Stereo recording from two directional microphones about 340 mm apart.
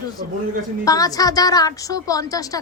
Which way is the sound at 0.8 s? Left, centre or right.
Centre.